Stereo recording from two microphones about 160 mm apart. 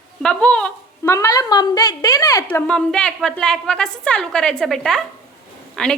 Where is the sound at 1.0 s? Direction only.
20° left (ahead or behind).